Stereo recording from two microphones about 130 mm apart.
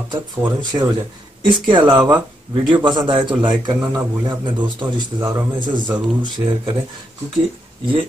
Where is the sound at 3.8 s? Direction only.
15° right (ahead or behind).